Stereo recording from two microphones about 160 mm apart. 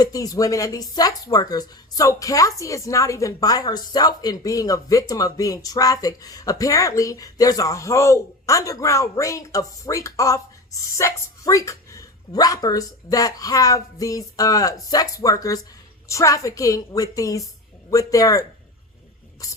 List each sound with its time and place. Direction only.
0.0 s speech: 20° left (ahead or behind)